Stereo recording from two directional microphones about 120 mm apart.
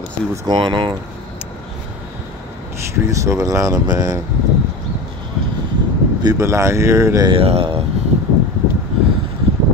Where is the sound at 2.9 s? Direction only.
25° right (ahead or behind).